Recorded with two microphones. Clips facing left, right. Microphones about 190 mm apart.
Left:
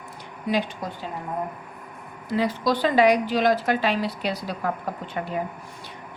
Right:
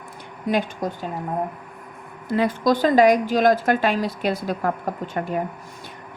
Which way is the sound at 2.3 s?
55° right (ahead or behind).